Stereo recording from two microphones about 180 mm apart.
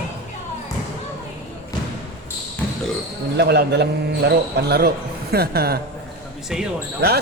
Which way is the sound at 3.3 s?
65° right (ahead or behind).